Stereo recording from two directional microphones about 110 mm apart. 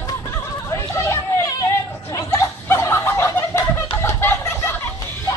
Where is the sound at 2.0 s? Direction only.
30° left (ahead or behind).